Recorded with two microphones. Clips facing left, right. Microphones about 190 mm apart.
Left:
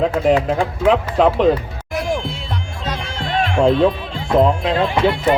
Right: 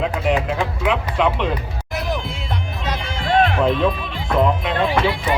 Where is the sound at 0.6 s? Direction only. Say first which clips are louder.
Left 5 dB; 35° left (ahead or behind).